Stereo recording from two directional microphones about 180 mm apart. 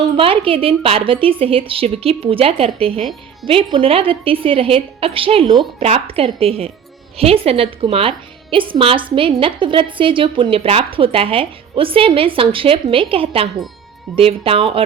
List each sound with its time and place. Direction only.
0.2 s a woman's voice: 30° right (ahead or behind)